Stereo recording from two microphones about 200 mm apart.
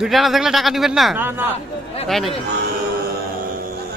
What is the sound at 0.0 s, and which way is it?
Speech, centre (ahead or behind).